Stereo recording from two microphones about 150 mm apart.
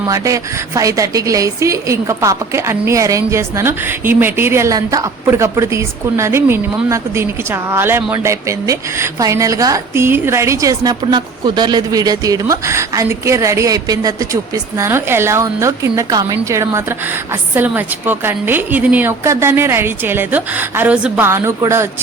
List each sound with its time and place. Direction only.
0.1 s a woman's voice: 20° right (ahead or behind)